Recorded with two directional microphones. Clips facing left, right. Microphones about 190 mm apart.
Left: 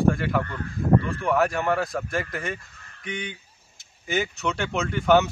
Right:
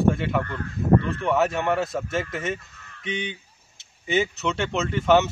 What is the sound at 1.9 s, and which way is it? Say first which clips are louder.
Speech: right 1 dB; centre (ahead or behind).